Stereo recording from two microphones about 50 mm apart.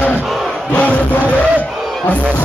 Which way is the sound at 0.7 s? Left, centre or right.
Left.